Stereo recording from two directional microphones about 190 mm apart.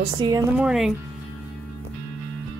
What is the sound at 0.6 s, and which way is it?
Speech, 5° right (ahead or behind).